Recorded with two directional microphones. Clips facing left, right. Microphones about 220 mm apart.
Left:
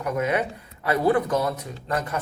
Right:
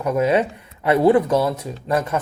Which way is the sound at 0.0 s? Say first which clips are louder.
Right 6 dB; 25° right (ahead or behind).